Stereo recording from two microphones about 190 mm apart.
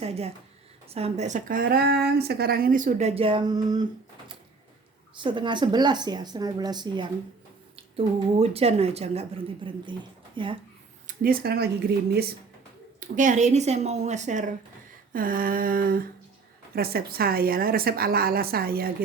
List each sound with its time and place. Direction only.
0.0 s speech: 30° right (ahead or behind)
5.1 s speech: 25° right (ahead or behind)
11.0 s speech: 50° right (ahead or behind)
13.0 s a woman's voice: 40° right (ahead or behind)